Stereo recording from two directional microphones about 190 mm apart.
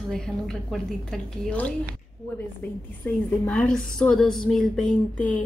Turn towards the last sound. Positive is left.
turn(degrees=5)  # may be behind; listen again after turning